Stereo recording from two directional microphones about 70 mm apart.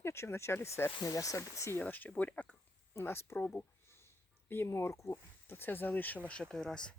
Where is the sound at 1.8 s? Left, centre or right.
Left.